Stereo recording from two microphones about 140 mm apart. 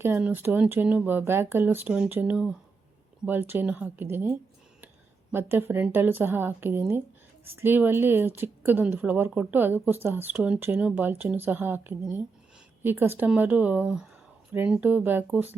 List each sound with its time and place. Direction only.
0.0 s a woman's voice: 15° right (ahead or behind)